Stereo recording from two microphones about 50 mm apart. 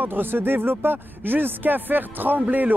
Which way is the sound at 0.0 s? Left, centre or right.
Right.